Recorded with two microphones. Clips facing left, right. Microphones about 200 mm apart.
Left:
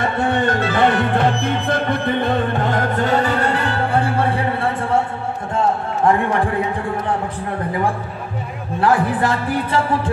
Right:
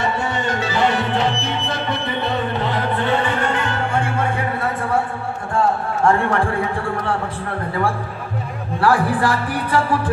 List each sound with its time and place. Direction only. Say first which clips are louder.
0.0 s music: left 4 dB; 55° left (ahead or behind); by 5.0 s 25° left (ahead or behind)
5.5 s a sound: even; 20° left (ahead or behind)
8.8 s speech: even; 20° left (ahead or behind)